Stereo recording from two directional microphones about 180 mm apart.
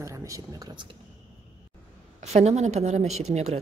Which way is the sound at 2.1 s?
40° right (ahead or behind).